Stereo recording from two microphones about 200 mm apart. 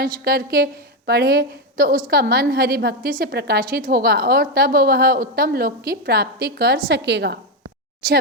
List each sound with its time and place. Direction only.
0.0 s a woman's voice: 50° right (ahead or behind)